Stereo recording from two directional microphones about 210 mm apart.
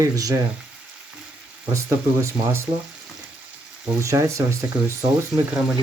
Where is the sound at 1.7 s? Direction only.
15° right (ahead or behind).